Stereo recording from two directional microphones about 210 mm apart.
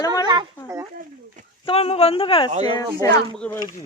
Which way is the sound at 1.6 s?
30° left (ahead or behind).